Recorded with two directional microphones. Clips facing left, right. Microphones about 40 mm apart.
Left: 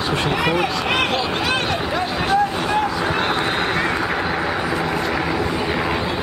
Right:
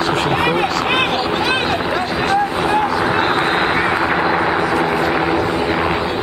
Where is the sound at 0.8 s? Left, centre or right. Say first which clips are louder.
Right 3 dB; centre.